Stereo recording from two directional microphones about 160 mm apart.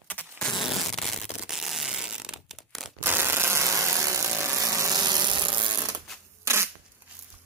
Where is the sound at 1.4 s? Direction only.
5° right (ahead or behind).